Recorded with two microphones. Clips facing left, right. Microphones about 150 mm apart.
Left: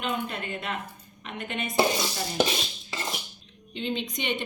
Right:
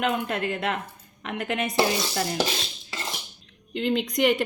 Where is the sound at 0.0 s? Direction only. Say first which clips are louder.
Right 5 dB; 90° right.